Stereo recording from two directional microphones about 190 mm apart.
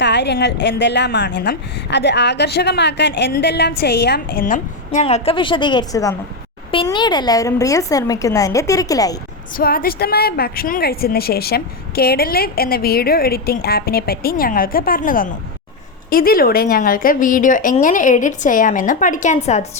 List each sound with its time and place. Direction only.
0.0 s a woman's voice: 65° left (ahead or behind); by 9.1 s 20° left (ahead or behind)
9.6 s a woman's voice: 50° left (ahead or behind)